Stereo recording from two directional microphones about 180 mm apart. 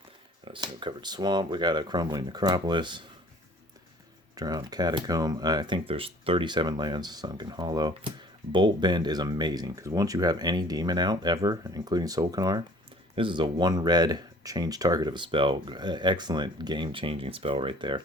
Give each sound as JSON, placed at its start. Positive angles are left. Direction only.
{"t": 0.4, "sound": "speech", "side_deg": -25}
{"t": 4.4, "sound": "speech", "side_deg": -20}